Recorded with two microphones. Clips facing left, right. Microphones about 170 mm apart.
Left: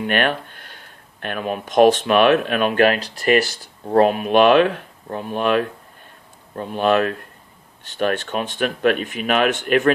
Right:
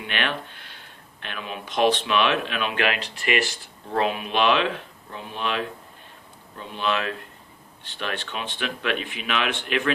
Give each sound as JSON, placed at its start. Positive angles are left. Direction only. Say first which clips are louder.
{"t": 0.0, "sound": "speech", "louder": "left 8 dB", "side_deg": 45}